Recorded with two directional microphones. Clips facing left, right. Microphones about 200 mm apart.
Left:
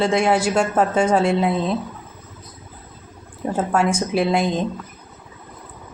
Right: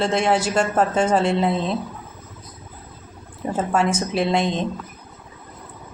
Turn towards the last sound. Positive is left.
turn(degrees=5)  # may be behind; listen again after turning